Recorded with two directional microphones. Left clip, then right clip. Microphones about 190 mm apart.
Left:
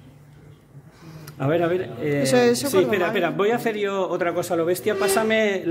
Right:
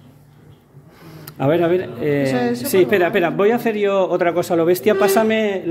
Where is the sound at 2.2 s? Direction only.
40° left (ahead or behind).